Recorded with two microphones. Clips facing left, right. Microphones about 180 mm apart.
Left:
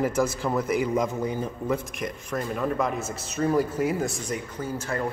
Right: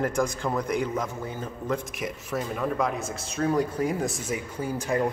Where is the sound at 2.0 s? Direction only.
5° right (ahead or behind).